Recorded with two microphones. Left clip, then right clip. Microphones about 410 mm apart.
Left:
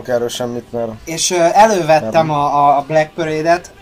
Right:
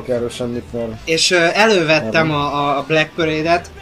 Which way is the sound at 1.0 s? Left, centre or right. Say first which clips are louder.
Right 1 dB; centre.